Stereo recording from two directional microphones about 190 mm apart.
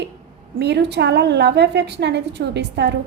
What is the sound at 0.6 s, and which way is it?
A woman's voice, 65° right (ahead or behind).